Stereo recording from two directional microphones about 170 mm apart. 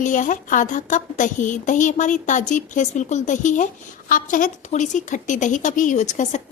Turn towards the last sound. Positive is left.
turn(degrees=45)  # may be behind; listen again after turning